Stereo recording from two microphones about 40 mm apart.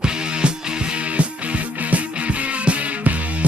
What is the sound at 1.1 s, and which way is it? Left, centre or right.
Music, right.